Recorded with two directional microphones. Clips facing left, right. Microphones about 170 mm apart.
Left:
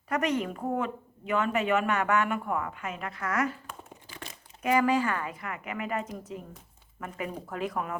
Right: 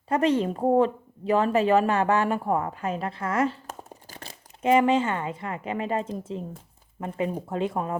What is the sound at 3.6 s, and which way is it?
Crumpling, 40° right (ahead or behind).